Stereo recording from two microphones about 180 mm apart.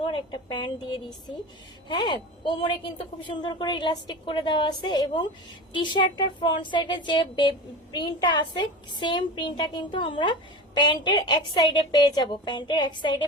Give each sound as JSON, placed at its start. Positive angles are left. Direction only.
{"t": 0.0, "sound": "a woman's voice", "side_deg": 25}